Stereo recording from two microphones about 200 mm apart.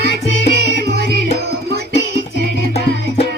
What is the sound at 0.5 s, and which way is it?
Music, 55° right (ahead or behind).